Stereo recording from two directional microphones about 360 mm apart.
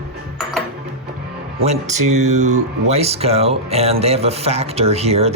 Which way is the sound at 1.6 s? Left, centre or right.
Centre.